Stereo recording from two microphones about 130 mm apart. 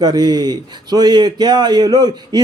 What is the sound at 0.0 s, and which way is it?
Speech, 30° right (ahead or behind).